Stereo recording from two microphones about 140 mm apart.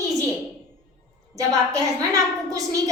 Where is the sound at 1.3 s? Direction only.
25° right (ahead or behind).